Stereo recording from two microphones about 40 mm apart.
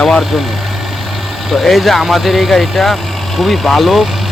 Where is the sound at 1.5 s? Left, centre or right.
Centre.